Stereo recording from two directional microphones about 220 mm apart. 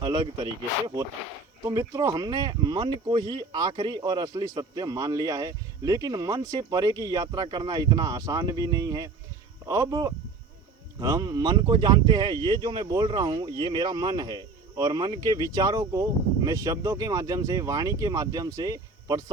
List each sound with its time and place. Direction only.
0.0 s speech: 20° right (ahead or behind)
1.6 s speech: 15° right (ahead or behind)